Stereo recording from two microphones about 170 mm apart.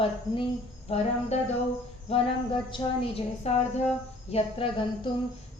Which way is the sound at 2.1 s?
35° left (ahead or behind).